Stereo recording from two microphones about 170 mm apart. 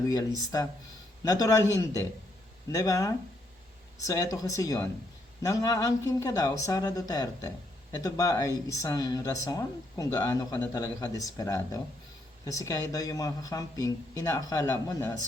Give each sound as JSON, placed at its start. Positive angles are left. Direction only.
{"t": 0.1, "sound": "speech", "side_deg": 25}